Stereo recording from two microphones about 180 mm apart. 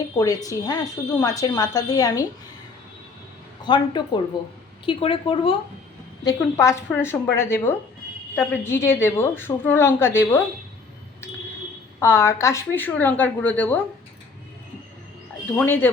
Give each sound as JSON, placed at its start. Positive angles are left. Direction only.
{"t": 0.4, "sound": "speech", "side_deg": 20}
{"t": 3.6, "sound": "speech", "side_deg": 25}
{"t": 6.2, "sound": "a woman's voice", "side_deg": 15}
{"t": 11.9, "sound": "a woman's voice", "side_deg": 15}
{"t": 15.5, "sound": "a woman's voice", "side_deg": 10}